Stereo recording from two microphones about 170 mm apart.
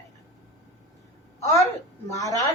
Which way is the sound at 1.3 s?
15° left (ahead or behind).